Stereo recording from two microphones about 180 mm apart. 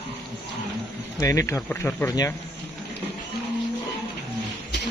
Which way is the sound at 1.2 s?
15° left (ahead or behind).